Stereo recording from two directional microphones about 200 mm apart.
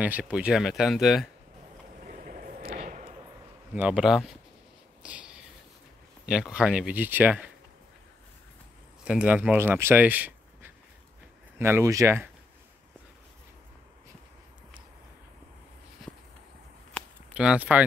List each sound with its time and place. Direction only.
0.0 s speech: 5° right (ahead or behind)
2.0 s vehicle: 40° right (ahead or behind)
3.7 s speech: 5° right (ahead or behind)
5.0 s a sound: 5° right (ahead or behind)
6.2 s speech: 5° right (ahead or behind)
9.0 s speech: 5° right (ahead or behind)
16.0 s a sound: centre (ahead or behind)
17.3 s speech: 5° right (ahead or behind)